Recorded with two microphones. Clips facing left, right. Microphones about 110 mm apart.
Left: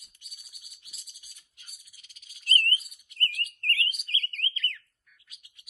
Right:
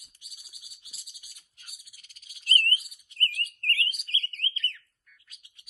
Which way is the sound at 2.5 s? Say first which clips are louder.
Even; 20° left (ahead or behind).